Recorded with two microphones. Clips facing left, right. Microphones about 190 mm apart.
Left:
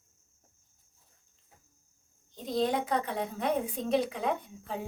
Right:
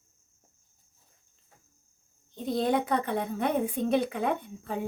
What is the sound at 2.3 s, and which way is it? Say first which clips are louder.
A woman's voice: right 3 dB; 60° right (ahead or behind).